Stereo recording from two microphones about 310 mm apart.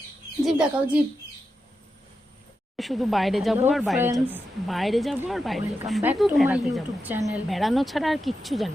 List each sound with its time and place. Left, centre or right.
0.4 s a woman's voice: centre
2.7 s a woman's voice: centre